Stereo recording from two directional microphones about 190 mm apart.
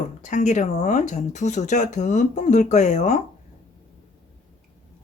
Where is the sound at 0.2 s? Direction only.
40° left (ahead or behind).